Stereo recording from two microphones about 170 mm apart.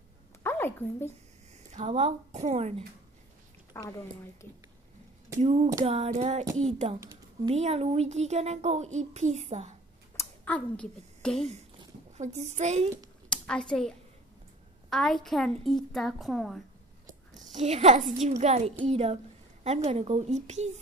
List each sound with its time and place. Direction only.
0.4 s a sound: 15° left (ahead or behind)
1.7 s a child's voice: 40° right (ahead or behind)
3.7 s speech: 15° left (ahead or behind)
5.4 s a child's voice: 40° right (ahead or behind)
10.1 s a sound: 10° left (ahead or behind)
12.2 s a child's voice: 40° right (ahead or behind)
13.3 s a woman's voice: 5° left (ahead or behind)
17.3 s a child's voice: 45° right (ahead or behind)